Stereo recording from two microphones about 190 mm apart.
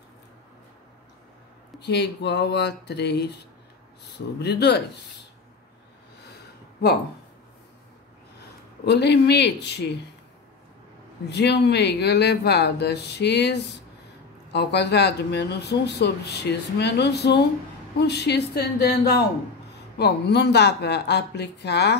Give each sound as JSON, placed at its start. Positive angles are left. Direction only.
{"t": 1.8, "sound": "speech", "side_deg": 60}
{"t": 4.4, "sound": "speech", "side_deg": 60}
{"t": 8.8, "sound": "speech", "side_deg": 60}
{"t": 11.2, "sound": "speech", "side_deg": 60}